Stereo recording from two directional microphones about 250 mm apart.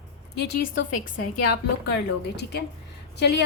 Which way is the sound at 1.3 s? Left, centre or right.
Left.